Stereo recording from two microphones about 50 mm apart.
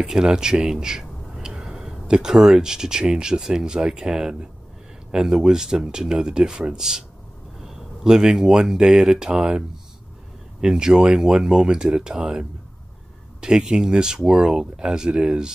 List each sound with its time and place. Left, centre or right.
0.0 s speech: centre